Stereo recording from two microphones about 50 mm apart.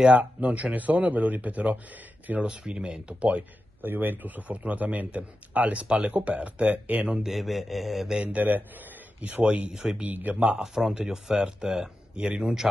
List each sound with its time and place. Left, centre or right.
0.2 s speech: right
3.8 s speech: right
7.2 s mantra: centre
8.1 s speech: right
10.0 s speech: right
10.6 s speech: centre